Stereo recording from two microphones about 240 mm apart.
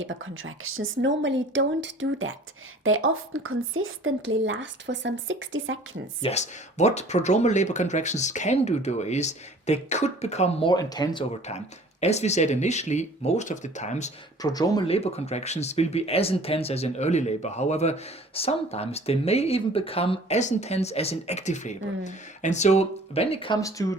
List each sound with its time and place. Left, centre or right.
0.0 s a woman's voice: right
6.2 s speech: left
14.4 s speech: centre